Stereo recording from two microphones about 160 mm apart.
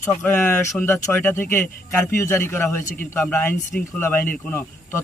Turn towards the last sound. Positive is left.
turn(degrees=15)  # may be behind; listen again after turning